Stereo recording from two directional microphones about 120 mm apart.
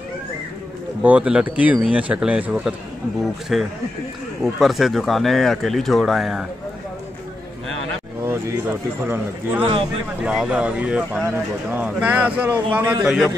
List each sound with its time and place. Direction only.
1.0 s speech: 10° right (ahead or behind)
8.2 s speech: 20° right (ahead or behind)
10.2 s speech: 10° right (ahead or behind)